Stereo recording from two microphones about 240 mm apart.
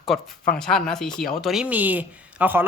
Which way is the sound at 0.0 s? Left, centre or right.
Centre.